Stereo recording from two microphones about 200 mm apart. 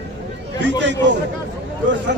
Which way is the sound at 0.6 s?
60° right (ahead or behind).